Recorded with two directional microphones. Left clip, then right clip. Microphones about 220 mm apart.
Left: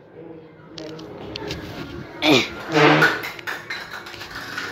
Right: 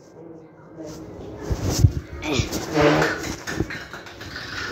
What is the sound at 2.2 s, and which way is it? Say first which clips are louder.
Speech: left 9 dB; 45° left (ahead or behind).